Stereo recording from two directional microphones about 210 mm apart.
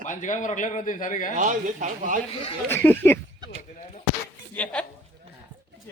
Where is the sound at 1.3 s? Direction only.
35° right (ahead or behind).